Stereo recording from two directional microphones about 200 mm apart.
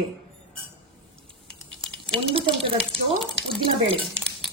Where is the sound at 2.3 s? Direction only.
25° right (ahead or behind).